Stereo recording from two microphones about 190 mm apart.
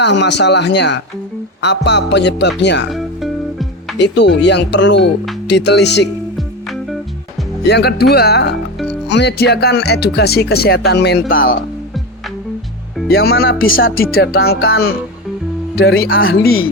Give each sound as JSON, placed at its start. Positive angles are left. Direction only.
{"t": 0.0, "sound": "speech", "side_deg": 65}
{"t": 2.9, "sound": "music", "side_deg": 0}
{"t": 3.9, "sound": "speech", "side_deg": 65}
{"t": 7.7, "sound": "speech", "side_deg": 60}
{"t": 13.1, "sound": "speech", "side_deg": 55}
{"t": 16.0, "sound": "speech", "side_deg": 50}